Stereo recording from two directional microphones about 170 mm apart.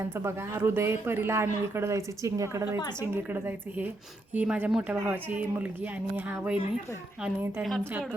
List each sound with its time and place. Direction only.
0.2 s a woman's voice: 15° right (ahead or behind)